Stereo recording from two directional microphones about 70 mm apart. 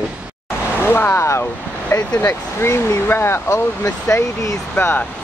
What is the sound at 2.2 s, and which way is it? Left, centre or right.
Speech, left.